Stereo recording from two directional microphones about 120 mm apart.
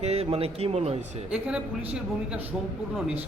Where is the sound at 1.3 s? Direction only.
10° right (ahead or behind).